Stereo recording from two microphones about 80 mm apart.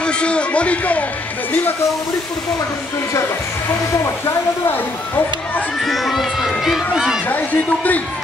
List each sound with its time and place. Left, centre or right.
0.0 s a man's voice: centre
4.0 s speech: left
5.8 s speech: centre
7.2 s speech: left